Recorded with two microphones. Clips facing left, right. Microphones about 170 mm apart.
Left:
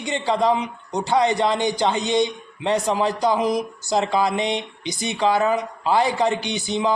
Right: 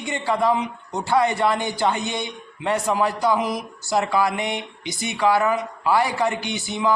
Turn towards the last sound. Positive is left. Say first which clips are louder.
# left 2 dB
turn(degrees=20)  # may be behind; listen again after turning